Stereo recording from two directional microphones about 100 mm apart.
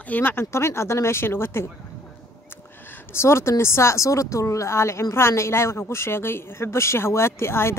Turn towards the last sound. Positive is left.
turn(degrees=25)  # may be behind; listen again after turning